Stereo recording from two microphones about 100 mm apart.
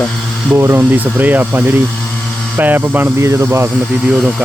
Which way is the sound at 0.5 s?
25° right (ahead or behind).